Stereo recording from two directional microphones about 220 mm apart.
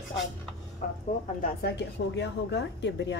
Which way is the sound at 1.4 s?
45° left (ahead or behind).